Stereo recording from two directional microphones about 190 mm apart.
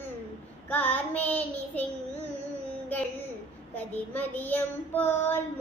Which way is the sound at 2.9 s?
10° left (ahead or behind).